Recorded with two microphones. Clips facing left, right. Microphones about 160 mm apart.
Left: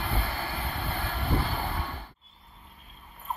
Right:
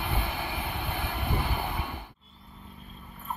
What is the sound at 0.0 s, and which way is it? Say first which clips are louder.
Vehicle: even; 15° right (ahead or behind).